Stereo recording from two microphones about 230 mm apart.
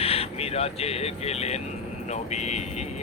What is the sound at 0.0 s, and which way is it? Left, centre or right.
Speech, left.